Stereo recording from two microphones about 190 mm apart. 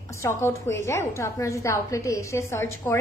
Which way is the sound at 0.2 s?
15° left (ahead or behind).